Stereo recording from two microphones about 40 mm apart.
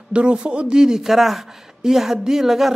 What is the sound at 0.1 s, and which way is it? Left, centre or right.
Speech, right.